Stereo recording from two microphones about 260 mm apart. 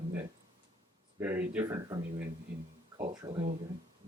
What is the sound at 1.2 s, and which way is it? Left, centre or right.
Speech, centre.